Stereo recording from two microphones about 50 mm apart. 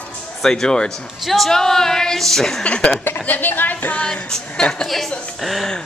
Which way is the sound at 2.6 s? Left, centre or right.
Left.